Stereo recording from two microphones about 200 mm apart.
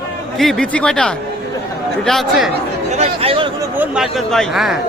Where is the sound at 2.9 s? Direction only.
30° right (ahead or behind).